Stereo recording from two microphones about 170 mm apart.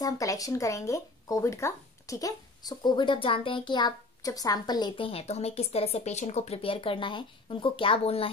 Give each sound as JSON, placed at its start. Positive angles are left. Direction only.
{"t": 0.0, "sound": "speech", "side_deg": 20}